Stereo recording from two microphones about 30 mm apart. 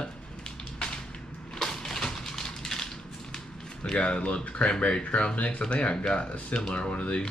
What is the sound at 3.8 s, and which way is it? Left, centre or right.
Speech, left.